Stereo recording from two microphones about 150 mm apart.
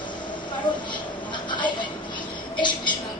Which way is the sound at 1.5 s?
30° left (ahead or behind).